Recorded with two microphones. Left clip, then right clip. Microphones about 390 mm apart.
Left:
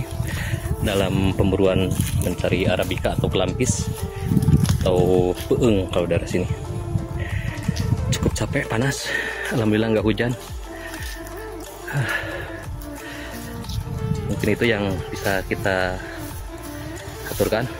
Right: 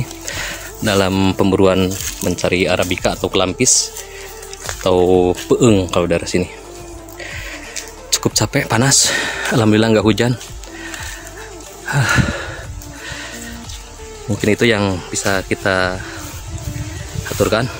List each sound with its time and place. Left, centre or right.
0.4 s speech: left
4.8 s speech: left
8.1 s speech: left
11.9 s a sound: left
14.4 s speech: left
17.4 s speech: left